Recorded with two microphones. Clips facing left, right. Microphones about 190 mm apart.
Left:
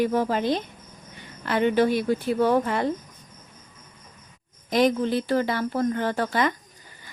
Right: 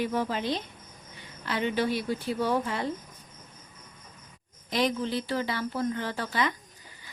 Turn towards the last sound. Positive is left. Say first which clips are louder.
# left 6 dB
turn(degrees=50)  # may be behind; listen again after turning